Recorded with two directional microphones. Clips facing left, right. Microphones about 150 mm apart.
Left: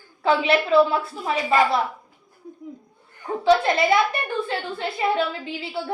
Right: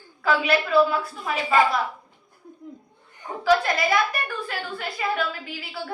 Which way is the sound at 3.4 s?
25° left (ahead or behind).